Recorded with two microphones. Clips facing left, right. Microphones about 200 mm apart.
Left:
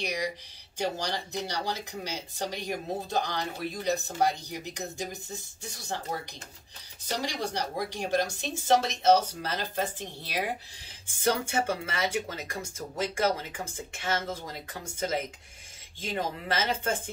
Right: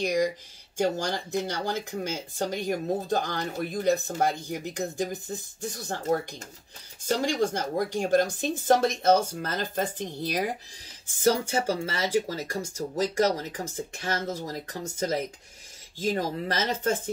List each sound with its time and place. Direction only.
0.0 s speech: 45° right (ahead or behind)
7.1 s speech: 50° right (ahead or behind)
11.5 s speech: 30° right (ahead or behind)